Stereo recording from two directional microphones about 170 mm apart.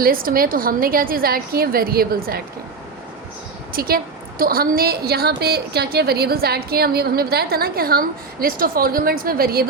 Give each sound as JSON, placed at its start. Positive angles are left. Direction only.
{"t": 0.0, "sound": "a woman's voice", "side_deg": -55}
{"t": 3.7, "sound": "a woman's voice", "side_deg": -60}